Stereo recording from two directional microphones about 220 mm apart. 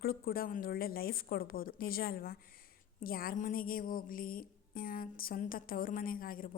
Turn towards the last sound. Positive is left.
turn(degrees=40)  # may be behind; listen again after turning